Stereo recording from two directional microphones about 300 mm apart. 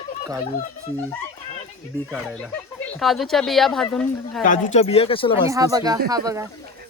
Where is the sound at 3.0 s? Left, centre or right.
Centre.